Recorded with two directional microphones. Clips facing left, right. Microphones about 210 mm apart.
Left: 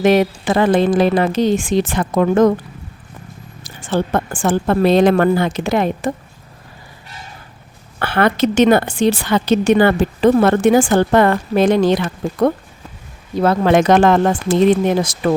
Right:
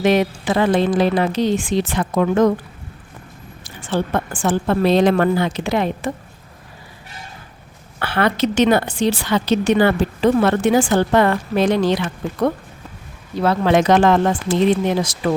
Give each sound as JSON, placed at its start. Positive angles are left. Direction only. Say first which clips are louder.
{"t": 0.0, "sound": "a woman's voice", "louder": "left 3 dB", "side_deg": 50}
{"t": 3.6, "sound": "a woman's voice", "louder": "left 2 dB", "side_deg": 45}
{"t": 7.9, "sound": "a woman's voice", "louder": "left 3 dB", "side_deg": 50}